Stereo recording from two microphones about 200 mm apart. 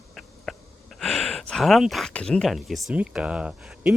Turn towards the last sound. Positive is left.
turn(degrees=-5)  # may be behind; listen again after turning